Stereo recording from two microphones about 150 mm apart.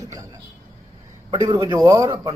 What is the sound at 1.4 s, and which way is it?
Speech, 30° right (ahead or behind).